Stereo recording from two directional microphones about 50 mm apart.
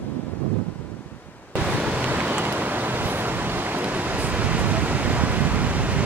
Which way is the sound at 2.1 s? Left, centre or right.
Right.